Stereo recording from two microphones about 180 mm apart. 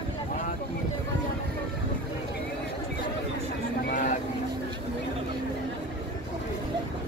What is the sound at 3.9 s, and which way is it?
Vehicle, 45° left (ahead or behind).